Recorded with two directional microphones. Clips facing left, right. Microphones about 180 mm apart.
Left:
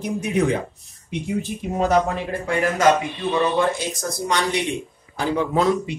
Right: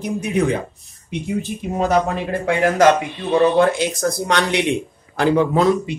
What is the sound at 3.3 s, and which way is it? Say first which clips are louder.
Speech: right 7 dB; 60° right (ahead or behind).